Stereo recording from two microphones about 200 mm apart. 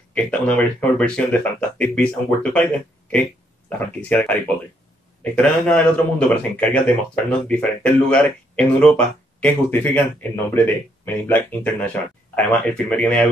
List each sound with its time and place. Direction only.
0.1 s speech: 5° left (ahead or behind)